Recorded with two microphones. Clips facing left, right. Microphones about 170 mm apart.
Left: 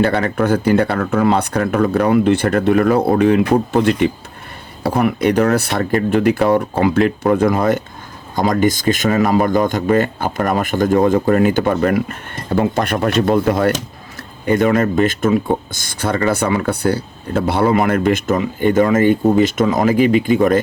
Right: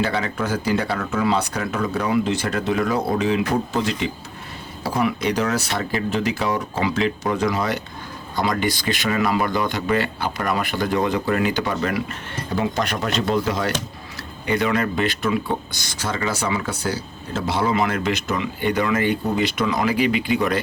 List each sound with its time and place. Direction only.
0.0 s speech: 55° left (ahead or behind)